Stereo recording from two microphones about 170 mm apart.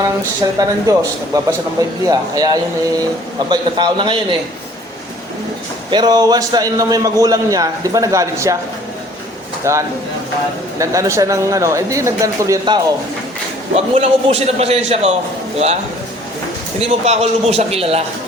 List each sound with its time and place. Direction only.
0.6 s a man's voice: 20° right (ahead or behind)
5.9 s a man's voice: 25° right (ahead or behind)
9.7 s a man's voice: 15° right (ahead or behind)
13.7 s a man's voice: 35° right (ahead or behind)
16.8 s a man's voice: 40° right (ahead or behind)